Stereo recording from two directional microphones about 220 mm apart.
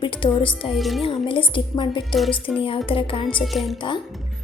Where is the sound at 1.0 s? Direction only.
25° left (ahead or behind).